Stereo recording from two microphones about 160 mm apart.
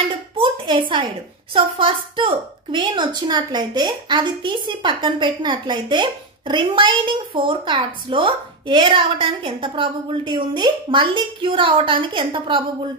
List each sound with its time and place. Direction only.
0.4 s a woman's voice: 30° right (ahead or behind)